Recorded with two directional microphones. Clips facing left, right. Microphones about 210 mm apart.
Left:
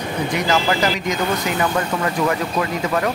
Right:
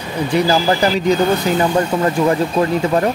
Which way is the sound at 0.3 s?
30° right (ahead or behind).